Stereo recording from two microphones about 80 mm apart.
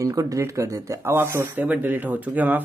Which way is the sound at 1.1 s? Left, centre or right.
Right.